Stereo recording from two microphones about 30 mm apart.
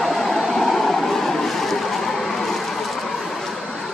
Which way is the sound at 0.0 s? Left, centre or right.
Centre.